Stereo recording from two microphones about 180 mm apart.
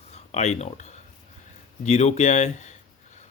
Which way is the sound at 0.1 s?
40° left (ahead or behind).